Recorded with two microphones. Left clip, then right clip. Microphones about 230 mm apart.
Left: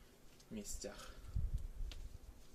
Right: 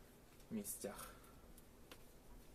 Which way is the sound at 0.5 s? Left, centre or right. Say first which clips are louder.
Even; centre.